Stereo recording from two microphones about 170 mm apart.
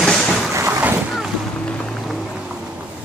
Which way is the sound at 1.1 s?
Centre (ahead or behind).